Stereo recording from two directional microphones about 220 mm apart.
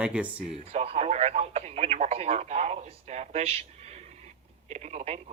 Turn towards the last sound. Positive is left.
turn(degrees=-30)  # may be behind; listen again after turning